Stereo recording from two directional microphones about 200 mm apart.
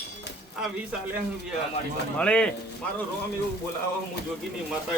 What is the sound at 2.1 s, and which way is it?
Speech, 5° left (ahead or behind).